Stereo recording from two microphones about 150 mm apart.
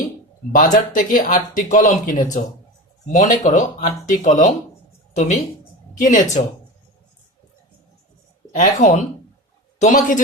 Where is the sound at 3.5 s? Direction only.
60° left (ahead or behind).